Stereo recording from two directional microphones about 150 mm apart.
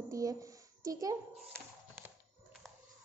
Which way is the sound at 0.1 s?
20° right (ahead or behind).